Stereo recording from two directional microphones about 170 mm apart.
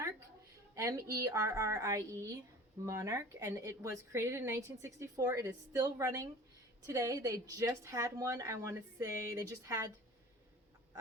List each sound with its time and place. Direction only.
0.8 s a woman's voice: 15° right (ahead or behind)